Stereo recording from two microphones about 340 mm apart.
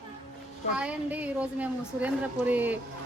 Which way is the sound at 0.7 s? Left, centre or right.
Centre.